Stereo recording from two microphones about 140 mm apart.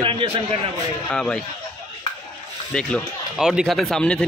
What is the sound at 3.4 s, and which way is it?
Speech, 5° right (ahead or behind).